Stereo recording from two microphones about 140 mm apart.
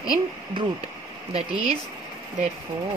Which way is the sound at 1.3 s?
45° right (ahead or behind).